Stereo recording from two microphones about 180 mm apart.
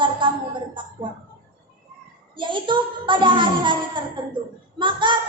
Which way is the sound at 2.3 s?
25° right (ahead or behind).